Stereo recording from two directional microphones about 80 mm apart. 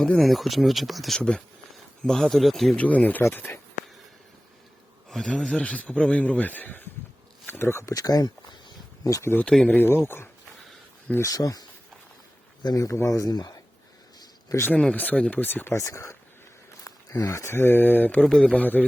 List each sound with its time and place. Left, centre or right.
0.2 s speech: centre
2.7 s speech: centre
5.0 s a man's voice: centre; by 7.9 s left
7.9 s a sound: left
9.4 s a man's voice: centre
9.7 s speech: left
11.2 s speech: left
12.6 s speech: left
14.7 s speech: centre
15.7 s speech: left
18.2 s a man's voice: centre